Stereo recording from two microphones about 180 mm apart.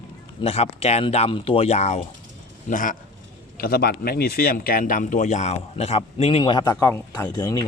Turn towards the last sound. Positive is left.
turn(degrees=20)  # may be behind; listen again after turning